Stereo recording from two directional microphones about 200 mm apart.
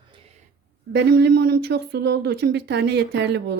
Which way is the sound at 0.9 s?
60° right (ahead or behind).